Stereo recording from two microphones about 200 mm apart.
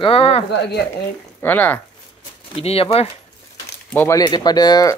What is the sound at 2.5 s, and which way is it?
Speech, 30° left (ahead or behind).